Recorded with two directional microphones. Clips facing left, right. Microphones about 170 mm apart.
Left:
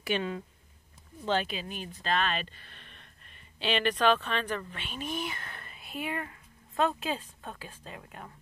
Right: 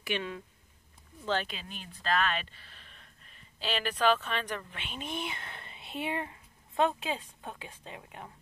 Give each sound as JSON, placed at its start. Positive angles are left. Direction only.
{"t": 0.1, "sound": "speech", "side_deg": 35}
{"t": 1.2, "sound": "speech", "side_deg": 20}
{"t": 1.5, "sound": "speech", "side_deg": 5}
{"t": 1.9, "sound": "speech", "side_deg": 35}
{"t": 3.6, "sound": "speech", "side_deg": -5}